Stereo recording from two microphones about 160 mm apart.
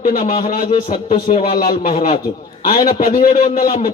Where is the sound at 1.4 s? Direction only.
60° left (ahead or behind).